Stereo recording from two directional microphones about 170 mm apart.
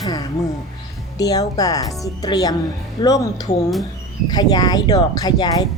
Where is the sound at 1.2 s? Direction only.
20° left (ahead or behind).